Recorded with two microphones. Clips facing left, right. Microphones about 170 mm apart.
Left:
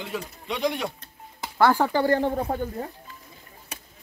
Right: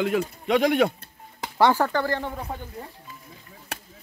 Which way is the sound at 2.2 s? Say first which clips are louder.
Left 7 dB; 45° left (ahead or behind).